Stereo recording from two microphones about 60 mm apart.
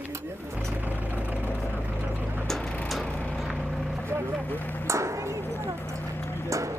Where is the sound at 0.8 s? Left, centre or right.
Right.